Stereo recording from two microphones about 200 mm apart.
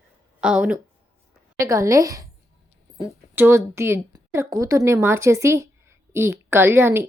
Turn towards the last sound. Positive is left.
turn(degrees=-10)  # may be behind; listen again after turning